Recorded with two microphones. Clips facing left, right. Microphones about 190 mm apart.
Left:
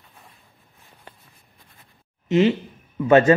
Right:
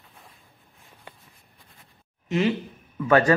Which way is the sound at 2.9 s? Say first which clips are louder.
Left 4 dB; 20° left (ahead or behind).